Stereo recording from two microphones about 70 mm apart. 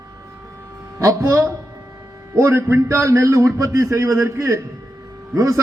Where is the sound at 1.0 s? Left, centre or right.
Right.